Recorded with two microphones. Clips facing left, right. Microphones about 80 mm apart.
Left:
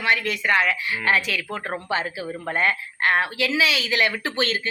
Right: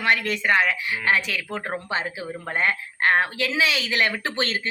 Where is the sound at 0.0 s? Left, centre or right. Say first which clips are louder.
Even; right.